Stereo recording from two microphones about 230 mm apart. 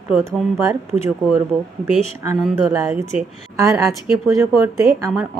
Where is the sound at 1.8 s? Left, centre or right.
Centre.